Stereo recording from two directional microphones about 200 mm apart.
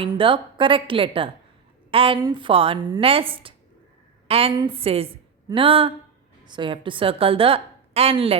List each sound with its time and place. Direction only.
0.0 s a woman's voice: 25° right (ahead or behind)